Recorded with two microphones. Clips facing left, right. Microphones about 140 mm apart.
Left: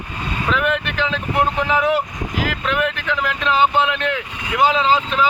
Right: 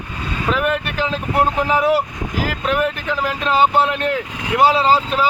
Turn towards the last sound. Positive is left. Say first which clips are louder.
# right 1 dB
turn(degrees=-35)  # may be behind; listen again after turning